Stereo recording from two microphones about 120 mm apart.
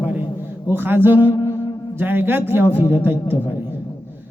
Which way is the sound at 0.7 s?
20° right (ahead or behind).